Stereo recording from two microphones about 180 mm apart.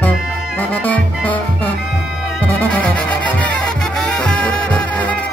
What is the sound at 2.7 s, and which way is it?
Music, 5° left (ahead or behind).